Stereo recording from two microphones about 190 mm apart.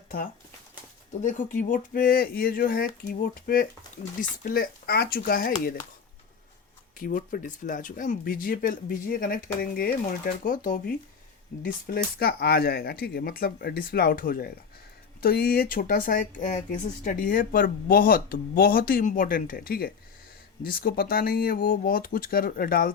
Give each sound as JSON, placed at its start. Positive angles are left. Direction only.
{"t": 1.2, "sound": "speech", "side_deg": 40}
{"t": 7.0, "sound": "speech", "side_deg": 45}